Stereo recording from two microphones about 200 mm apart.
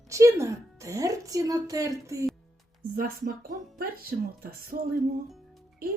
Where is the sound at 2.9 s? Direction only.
50° right (ahead or behind).